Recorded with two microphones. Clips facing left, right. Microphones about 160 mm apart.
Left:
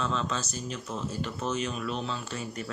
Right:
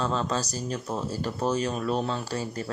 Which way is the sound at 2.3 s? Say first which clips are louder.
Right 4 dB; 30° right (ahead or behind).